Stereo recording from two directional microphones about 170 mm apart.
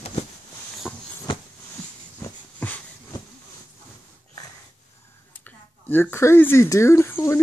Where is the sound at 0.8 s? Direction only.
Centre (ahead or behind).